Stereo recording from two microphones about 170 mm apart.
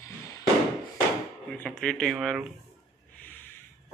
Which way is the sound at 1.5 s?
5° left (ahead or behind).